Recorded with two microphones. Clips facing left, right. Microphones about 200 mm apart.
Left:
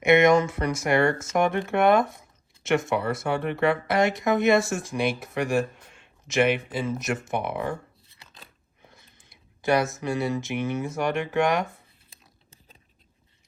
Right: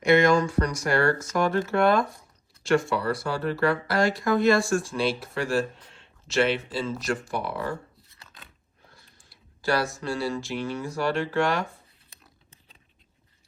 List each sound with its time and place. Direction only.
0.0 s speech: 20° left (ahead or behind)
8.9 s speech: 20° left (ahead or behind)